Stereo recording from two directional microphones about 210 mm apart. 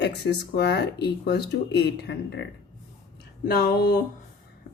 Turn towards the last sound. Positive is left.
turn(degrees=45)  # may be behind; listen again after turning